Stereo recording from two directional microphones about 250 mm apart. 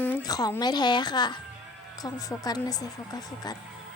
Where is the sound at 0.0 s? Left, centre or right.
Centre.